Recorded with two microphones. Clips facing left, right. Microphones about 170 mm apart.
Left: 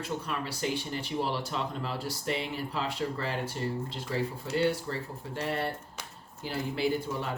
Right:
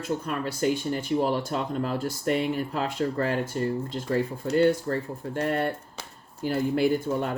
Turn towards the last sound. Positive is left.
turn(degrees=-50)  # may be behind; listen again after turning